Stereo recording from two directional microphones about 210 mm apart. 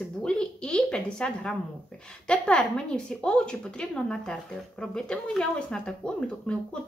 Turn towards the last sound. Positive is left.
turn(degrees=5)  # may be behind; listen again after turning